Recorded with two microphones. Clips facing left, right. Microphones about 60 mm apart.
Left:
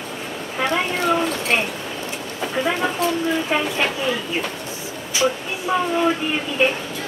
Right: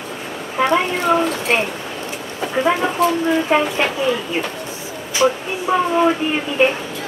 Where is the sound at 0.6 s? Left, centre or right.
Centre.